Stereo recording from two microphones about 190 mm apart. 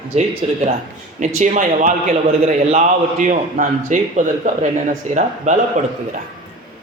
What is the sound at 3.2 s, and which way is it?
Speech, 40° right (ahead or behind).